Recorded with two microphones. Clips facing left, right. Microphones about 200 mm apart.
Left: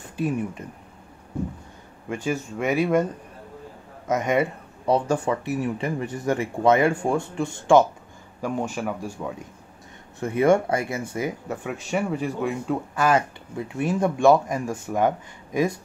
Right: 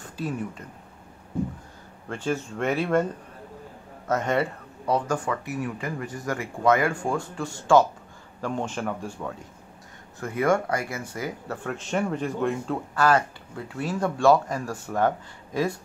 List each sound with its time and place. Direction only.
2.0 s speech: 10° left (ahead or behind)
4.1 s speech: 15° left (ahead or behind)
4.8 s speech: 25° left (ahead or behind)
8.4 s speech: 10° left (ahead or behind)
10.2 s speech: 20° left (ahead or behind); by 12.7 s 5° left (ahead or behind)
12.9 s speech: 20° left (ahead or behind)